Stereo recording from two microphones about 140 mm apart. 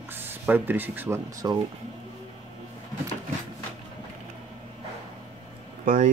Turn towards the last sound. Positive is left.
turn(degrees=-60)  # may be behind; listen again after turning